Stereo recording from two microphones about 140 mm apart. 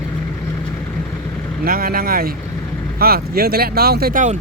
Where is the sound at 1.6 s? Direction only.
90° right; by 4.4 s 70° right (ahead or behind).